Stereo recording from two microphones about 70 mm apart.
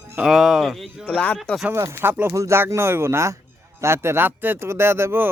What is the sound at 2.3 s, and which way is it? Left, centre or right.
Speech, right.